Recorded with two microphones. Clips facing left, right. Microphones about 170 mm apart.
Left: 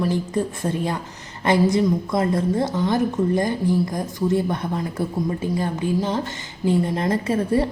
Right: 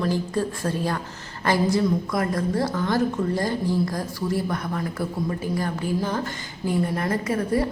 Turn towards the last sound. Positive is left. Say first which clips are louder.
# left 3 dB
turn(degrees=25)  # may be behind; listen again after turning